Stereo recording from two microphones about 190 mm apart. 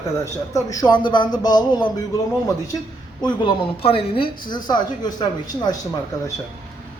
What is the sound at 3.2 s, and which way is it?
A woman's voice, 25° left (ahead or behind).